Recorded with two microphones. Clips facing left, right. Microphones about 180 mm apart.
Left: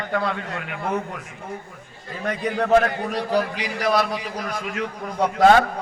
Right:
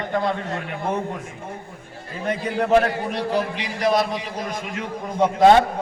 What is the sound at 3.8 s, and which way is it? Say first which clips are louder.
Speech: right 1 dB; 35° right (ahead or behind).